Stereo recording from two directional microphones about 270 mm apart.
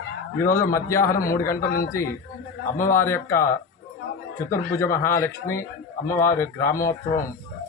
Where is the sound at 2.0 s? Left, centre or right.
Centre.